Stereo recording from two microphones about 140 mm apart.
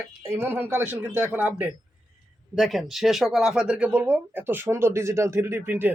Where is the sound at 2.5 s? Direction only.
Centre (ahead or behind).